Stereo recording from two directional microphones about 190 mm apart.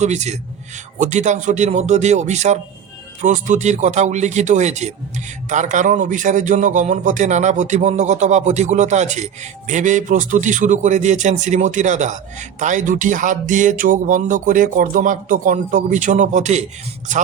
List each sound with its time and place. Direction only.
0.0 s speech: 35° right (ahead or behind)